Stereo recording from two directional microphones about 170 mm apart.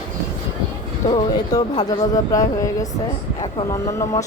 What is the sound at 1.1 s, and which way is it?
Speech, 25° left (ahead or behind).